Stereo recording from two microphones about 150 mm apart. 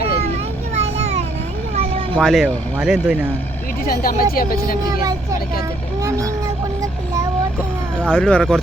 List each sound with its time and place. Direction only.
0.7 s a sound: 45° right (ahead or behind)
1.7 s children playing: 40° right (ahead or behind)
2.1 s speech: 5° left (ahead or behind)
3.8 s speech: 70° left (ahead or behind)
6.0 s speech: 20° right (ahead or behind)
8.1 s speech: 10° left (ahead or behind)